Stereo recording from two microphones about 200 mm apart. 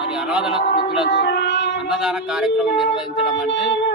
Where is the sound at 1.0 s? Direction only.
55° left (ahead or behind).